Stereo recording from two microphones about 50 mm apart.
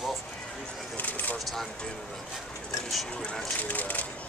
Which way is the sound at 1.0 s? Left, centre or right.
Left.